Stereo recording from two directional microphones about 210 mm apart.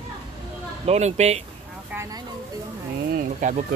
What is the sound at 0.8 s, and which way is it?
Speech, 30° right (ahead or behind).